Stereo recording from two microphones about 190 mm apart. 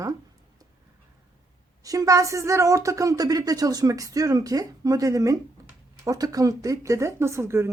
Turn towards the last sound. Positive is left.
turn(degrees=-15)  # may be behind; listen again after turning